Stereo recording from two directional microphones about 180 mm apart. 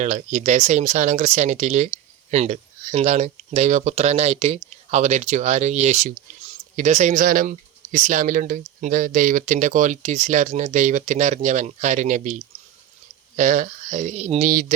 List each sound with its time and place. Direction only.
0.0 s speech: 40° right (ahead or behind)